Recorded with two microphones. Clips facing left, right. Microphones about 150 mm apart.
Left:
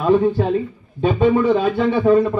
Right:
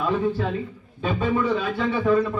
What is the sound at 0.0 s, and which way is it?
A man's voice, 35° left (ahead or behind).